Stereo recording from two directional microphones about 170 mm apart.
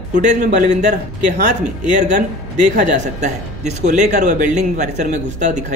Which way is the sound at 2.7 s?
45° right (ahead or behind).